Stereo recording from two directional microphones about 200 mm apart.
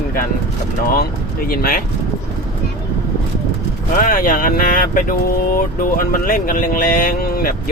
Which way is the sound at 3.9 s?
45° left (ahead or behind).